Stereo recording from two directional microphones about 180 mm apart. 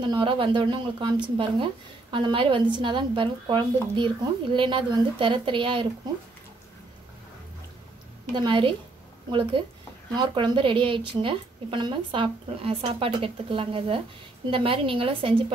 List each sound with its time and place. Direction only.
0.0 s speech: 25° right (ahead or behind)
8.3 s a woman's voice: 25° right (ahead or behind)